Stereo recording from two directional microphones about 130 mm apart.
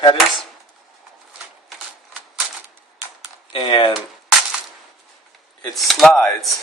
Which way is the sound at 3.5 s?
40° left (ahead or behind).